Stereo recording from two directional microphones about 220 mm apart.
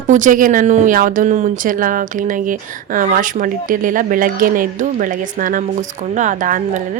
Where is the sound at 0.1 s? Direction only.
35° right (ahead or behind).